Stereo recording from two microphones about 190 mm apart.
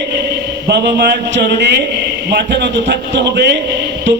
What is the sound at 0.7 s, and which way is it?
A man's voice, 60° right (ahead or behind).